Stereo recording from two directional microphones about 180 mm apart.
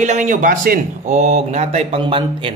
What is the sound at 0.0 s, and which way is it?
A man's voice, 40° right (ahead or behind).